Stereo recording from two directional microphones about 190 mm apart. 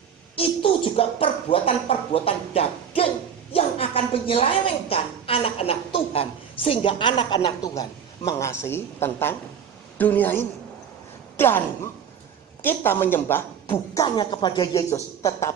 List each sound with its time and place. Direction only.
0.4 s a woman's voice: 30° left (ahead or behind); by 14.0 s 10° left (ahead or behind)
14.0 s a woman's voice: 25° left (ahead or behind)